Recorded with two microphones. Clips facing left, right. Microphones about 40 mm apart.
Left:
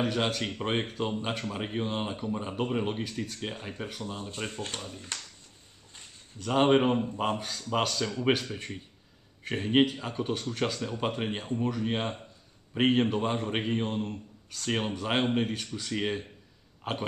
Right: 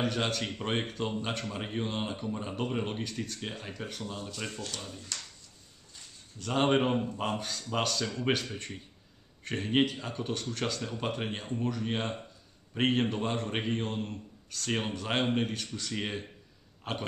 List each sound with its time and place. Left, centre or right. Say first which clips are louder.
0.0 s a man's voice: left 2 dB; centre
4.2 s speech: left 2 dB; left
6.4 s a man's voice: left 4 dB; centre